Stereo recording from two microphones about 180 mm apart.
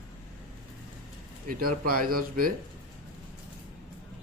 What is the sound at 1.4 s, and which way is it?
Speech, 55° right (ahead or behind).